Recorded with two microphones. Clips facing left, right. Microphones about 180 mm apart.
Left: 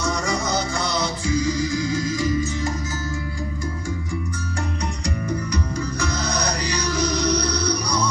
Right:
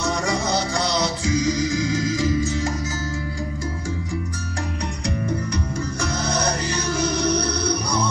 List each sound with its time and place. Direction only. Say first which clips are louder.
1.2 s music: even; 90° right
6.9 s music: even; 25° right (ahead or behind)